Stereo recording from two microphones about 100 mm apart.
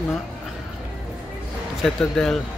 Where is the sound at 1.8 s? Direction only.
5° left (ahead or behind).